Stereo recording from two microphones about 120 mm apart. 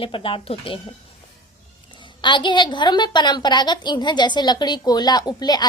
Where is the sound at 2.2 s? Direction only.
40° left (ahead or behind).